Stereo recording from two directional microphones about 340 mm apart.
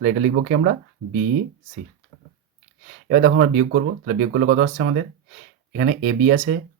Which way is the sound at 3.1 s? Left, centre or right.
Right.